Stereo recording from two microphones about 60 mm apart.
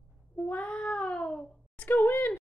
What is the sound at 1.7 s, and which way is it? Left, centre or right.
Speech, left.